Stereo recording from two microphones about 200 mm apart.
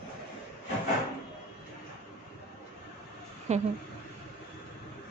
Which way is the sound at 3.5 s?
35° right (ahead or behind).